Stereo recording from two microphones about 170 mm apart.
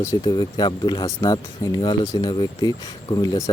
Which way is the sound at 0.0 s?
20° left (ahead or behind).